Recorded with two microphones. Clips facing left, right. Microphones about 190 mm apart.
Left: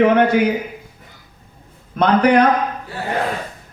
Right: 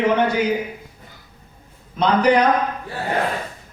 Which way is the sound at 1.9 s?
55° left (ahead or behind).